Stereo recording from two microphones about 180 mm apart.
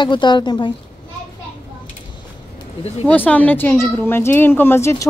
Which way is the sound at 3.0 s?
10° left (ahead or behind).